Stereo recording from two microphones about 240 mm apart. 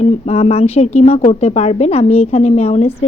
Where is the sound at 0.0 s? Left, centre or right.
Left.